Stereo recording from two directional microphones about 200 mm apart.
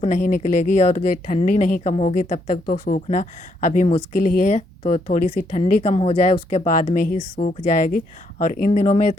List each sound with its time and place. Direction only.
0.0 s speech: 40° left (ahead or behind)